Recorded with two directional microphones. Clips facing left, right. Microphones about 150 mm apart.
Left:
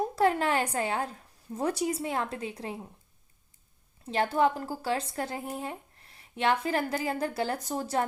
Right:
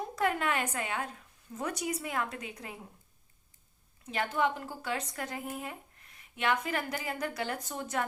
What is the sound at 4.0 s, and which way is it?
A woman's voice, 30° left (ahead or behind).